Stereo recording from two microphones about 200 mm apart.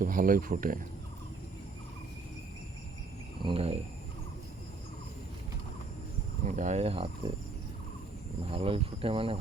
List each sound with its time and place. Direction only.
0.0 s speech: 45° right (ahead or behind)
3.4 s speech: 30° right (ahead or behind)
6.4 s speech: 40° right (ahead or behind)
8.4 s speech: 25° right (ahead or behind)